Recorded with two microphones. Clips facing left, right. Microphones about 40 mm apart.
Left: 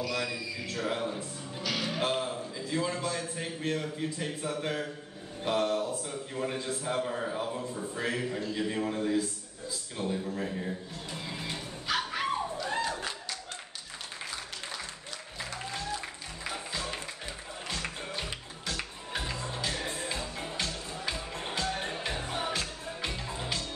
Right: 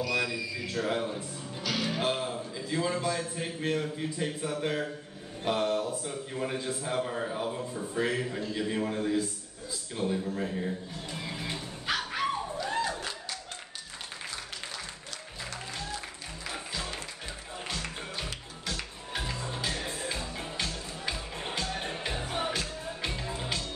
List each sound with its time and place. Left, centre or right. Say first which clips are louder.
0.0 s a man's voice: right 3 dB; centre
11.9 s dog: even; right
12.6 s a sound: right 3 dB; centre
17.8 s music: left 1 dB; centre
19.3 s music: even; centre
19.8 s music: even; centre